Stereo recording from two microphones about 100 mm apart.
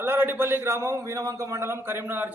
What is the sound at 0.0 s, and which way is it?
A man's voice, 20° right (ahead or behind).